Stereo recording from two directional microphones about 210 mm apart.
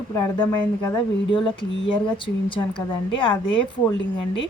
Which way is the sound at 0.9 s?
25° left (ahead or behind).